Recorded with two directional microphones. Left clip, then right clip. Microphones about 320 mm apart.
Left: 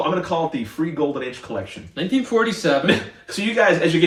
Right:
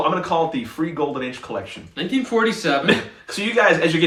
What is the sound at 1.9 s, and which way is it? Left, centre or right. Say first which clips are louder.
Speech: left 1 dB; centre.